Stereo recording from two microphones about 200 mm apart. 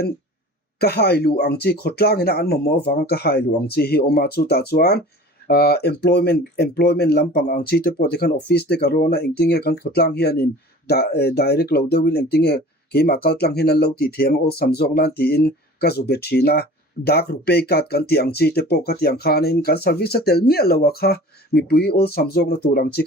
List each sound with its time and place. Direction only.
0.8 s speech: 55° left (ahead or behind)